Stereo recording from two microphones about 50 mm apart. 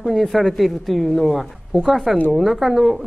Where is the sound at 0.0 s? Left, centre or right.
Centre.